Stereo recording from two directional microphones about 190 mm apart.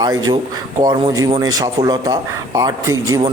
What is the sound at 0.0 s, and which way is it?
Speech, 20° right (ahead or behind).